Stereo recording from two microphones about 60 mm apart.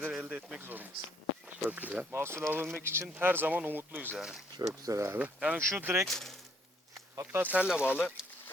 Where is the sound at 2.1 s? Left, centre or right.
Right.